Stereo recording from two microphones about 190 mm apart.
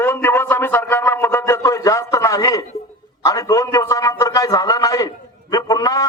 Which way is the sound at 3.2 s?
15° left (ahead or behind).